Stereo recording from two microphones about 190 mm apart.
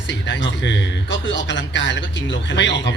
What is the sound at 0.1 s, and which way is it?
A man's voice, 70° left (ahead or behind).